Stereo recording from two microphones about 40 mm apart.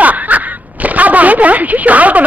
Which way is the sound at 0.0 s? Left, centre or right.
Right.